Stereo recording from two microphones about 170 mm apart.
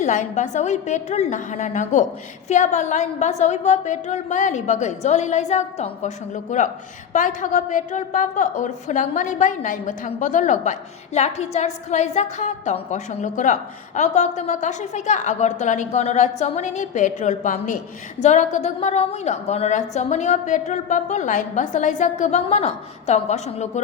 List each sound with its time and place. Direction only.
0.0 s a woman's voice: 45° left (ahead or behind)